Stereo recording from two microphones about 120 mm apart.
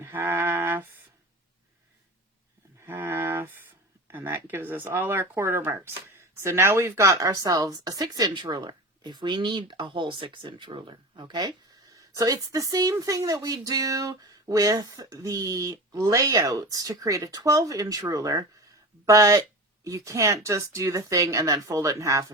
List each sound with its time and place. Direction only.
0.0 s music: 15° right (ahead or behind)
2.8 s speech: 20° right (ahead or behind)